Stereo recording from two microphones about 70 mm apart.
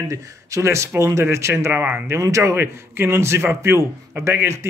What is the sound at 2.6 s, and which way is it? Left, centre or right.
A man's voice, right.